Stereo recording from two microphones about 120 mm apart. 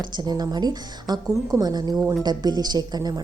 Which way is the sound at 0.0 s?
40° right (ahead or behind).